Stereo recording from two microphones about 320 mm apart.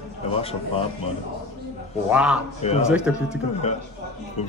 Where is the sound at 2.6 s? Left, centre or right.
Centre.